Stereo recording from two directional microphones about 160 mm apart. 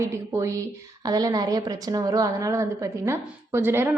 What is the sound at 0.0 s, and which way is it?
A woman's voice, 15° right (ahead or behind).